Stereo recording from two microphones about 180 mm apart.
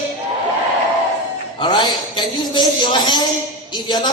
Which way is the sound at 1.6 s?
25° left (ahead or behind).